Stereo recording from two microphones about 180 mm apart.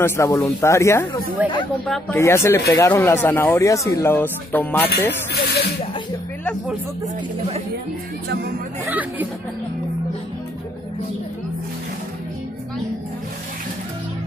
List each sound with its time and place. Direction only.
0.0 s speech: 15° left (ahead or behind)
5.3 s speech: 65° left (ahead or behind)
8.8 s speech: 10° right (ahead or behind)